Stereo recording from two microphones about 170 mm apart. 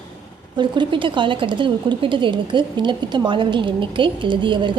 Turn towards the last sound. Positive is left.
turn(degrees=-30)  # may be behind; listen again after turning